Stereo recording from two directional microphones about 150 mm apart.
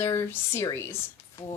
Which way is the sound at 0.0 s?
15° left (ahead or behind).